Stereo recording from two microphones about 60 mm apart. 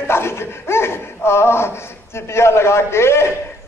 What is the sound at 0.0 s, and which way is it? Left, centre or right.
Speech, left.